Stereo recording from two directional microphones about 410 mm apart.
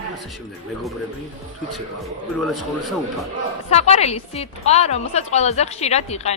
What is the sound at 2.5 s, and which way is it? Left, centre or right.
Speech, centre.